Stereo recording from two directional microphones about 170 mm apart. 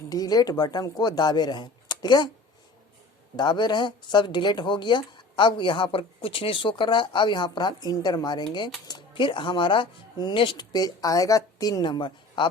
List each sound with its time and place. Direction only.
0.1 s speech: 20° left (ahead or behind)
3.3 s speech: 25° left (ahead or behind)